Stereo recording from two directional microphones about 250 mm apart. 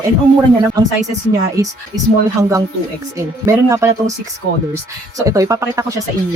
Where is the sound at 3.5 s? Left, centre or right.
Centre.